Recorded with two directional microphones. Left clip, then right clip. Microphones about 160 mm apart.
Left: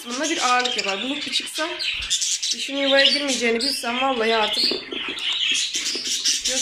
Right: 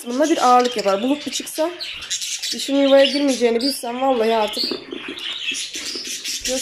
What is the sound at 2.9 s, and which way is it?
Speech, 10° right (ahead or behind).